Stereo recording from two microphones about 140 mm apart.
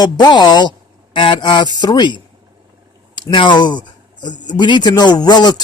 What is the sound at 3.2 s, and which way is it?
Speech, 35° left (ahead or behind).